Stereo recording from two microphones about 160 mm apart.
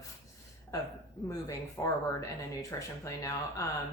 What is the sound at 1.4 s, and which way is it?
A woman's voice, 15° left (ahead or behind).